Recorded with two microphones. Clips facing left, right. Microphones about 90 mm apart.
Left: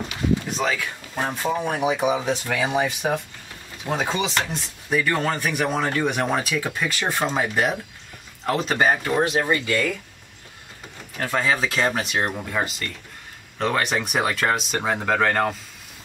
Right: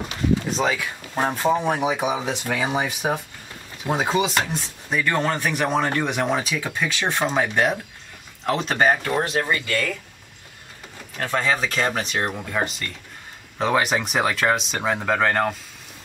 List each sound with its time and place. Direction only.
0.1 s a sound: 25° right (ahead or behind)
1.4 s speech: 20° right (ahead or behind); by 9.2 s centre (ahead or behind)
9.5 s speech: 25° left (ahead or behind)
11.1 s speech: 5° left (ahead or behind)
13.6 s speech: 5° right (ahead or behind)